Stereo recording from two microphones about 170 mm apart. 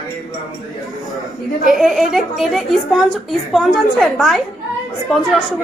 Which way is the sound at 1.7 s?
Centre (ahead or behind).